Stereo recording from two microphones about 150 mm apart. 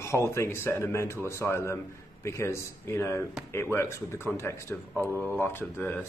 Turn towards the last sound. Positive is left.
turn(degrees=15)  # may be behind; listen again after turning